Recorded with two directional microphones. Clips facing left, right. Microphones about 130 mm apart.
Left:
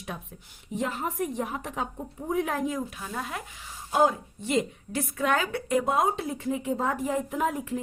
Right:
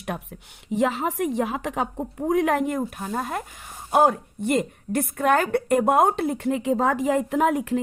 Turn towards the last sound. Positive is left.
turn(degrees=-75)  # may be behind; listen again after turning